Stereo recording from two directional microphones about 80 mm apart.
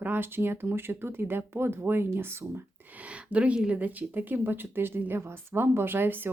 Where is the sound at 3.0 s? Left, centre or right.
Centre.